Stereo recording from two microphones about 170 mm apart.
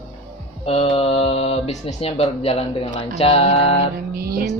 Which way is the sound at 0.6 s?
35° left (ahead or behind).